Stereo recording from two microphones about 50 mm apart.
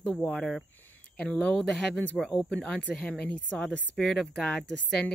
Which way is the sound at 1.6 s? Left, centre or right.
Centre.